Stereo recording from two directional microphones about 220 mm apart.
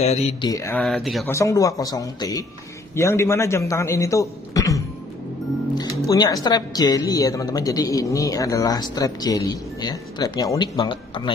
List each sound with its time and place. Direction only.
0.0 s mantra: 30° left (ahead or behind)
0.5 s speech: 15° left (ahead or behind)
0.8 s speech: centre (ahead or behind)
1.3 s speech: 15° left (ahead or behind)